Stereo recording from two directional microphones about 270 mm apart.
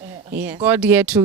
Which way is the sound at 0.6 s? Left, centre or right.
Centre.